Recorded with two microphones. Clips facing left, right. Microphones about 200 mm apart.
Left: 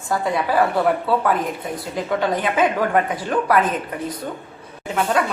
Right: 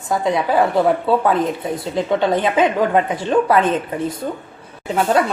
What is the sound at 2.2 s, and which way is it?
A woman's voice, 25° right (ahead or behind).